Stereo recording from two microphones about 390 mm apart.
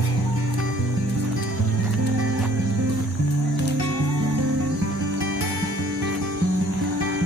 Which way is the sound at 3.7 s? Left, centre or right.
Right.